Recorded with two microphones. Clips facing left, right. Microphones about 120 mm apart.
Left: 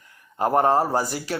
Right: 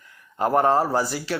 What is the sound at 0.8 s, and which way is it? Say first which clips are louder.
Speech: even; 40° left (ahead or behind).